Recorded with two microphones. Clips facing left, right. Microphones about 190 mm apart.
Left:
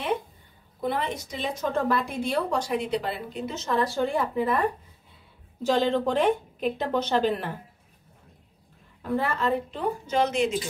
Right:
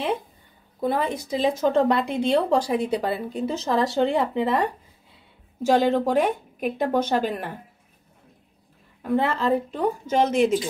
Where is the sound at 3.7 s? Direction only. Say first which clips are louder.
Right 3 dB; 70° right (ahead or behind).